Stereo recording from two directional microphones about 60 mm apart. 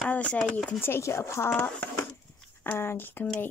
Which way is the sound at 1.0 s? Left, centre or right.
Left.